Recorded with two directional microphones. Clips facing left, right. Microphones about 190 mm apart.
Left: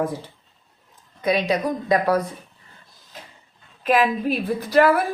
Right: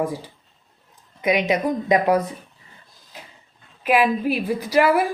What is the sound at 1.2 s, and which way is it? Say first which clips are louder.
A woman's voice: right 1 dB; 15° right (ahead or behind).